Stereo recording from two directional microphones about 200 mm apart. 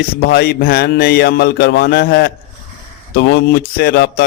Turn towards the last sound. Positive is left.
turn(degrees=55)  # may be behind; listen again after turning